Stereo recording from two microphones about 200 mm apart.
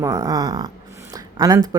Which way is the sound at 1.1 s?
20° right (ahead or behind).